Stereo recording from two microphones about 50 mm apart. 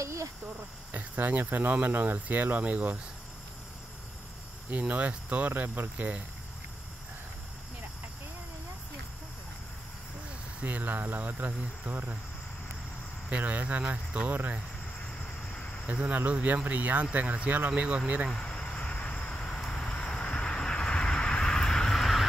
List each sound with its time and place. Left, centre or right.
0.0 s speech: right
0.9 s speech: right
4.6 s speech: right
5.5 s speech: right
5.9 s speech: right
10.6 s speech: right
13.3 s speech: right
15.5 s a sound: left
15.9 s speech: right
18.3 s vehicle: centre